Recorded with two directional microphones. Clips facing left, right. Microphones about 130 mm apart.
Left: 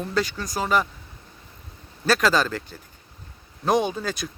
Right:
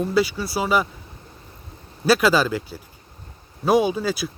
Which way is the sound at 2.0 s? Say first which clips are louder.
Right 3 dB; 10° right (ahead or behind).